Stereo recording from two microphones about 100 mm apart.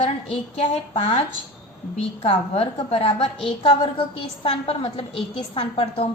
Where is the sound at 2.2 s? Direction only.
85° left.